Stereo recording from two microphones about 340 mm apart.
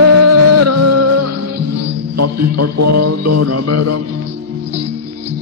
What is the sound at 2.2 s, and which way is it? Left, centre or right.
Speech, right.